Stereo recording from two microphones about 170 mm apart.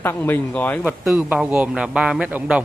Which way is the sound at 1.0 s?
10° right (ahead or behind).